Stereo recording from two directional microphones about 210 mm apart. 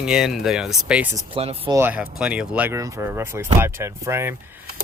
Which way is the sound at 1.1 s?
25° right (ahead or behind).